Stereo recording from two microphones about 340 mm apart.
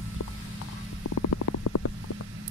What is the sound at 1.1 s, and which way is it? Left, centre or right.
Stomach rumble, left.